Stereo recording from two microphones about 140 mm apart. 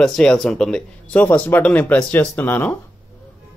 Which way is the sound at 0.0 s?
5° left (ahead or behind).